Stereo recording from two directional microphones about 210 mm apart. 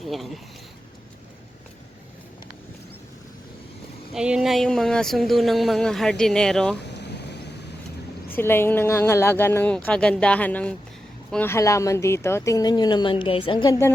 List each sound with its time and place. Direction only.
0.0 s speech: centre (ahead or behind)
4.1 s speech: 5° right (ahead or behind)
6.8 s vehicle: 55° left (ahead or behind)
8.3 s a woman's voice: 10° left (ahead or behind)